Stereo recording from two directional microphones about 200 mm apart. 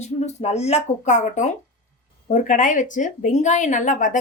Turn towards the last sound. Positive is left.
turn(degrees=40)  # may be behind; listen again after turning